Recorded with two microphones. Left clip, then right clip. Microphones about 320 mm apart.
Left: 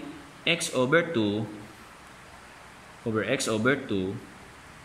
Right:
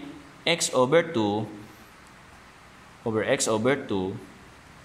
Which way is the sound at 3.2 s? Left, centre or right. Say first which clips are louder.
Right 3 dB; centre.